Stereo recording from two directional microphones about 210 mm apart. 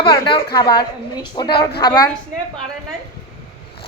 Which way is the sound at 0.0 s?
25° left (ahead or behind).